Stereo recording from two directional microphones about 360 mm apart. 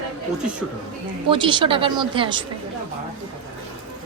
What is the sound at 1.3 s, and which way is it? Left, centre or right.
A woman's voice, centre.